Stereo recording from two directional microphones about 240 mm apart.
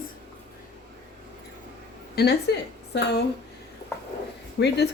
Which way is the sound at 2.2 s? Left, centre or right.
Left.